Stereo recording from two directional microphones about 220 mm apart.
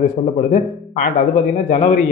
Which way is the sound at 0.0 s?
35° left (ahead or behind).